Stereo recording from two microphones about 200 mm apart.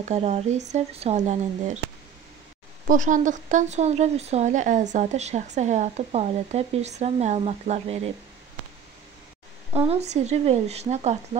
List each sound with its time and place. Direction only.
0.0 s a woman's voice: 35° right (ahead or behind)
2.9 s a woman's voice: 40° right (ahead or behind)
9.7 s a woman's voice: 30° right (ahead or behind)